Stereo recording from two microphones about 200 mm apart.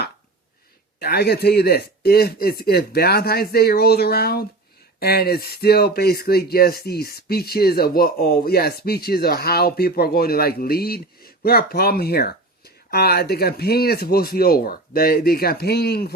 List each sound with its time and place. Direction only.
0.9 s speech: 50° left (ahead or behind)